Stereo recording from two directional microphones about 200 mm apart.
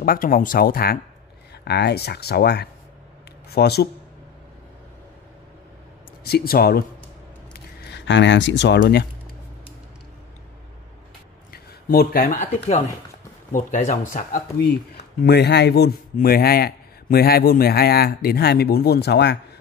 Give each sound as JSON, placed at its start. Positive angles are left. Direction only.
{"t": 0.0, "sound": "a man's voice", "side_deg": 45}
{"t": 6.2, "sound": "a man's voice", "side_deg": 50}
{"t": 11.5, "sound": "a man's voice", "side_deg": 50}
{"t": 15.2, "sound": "a man's voice", "side_deg": 55}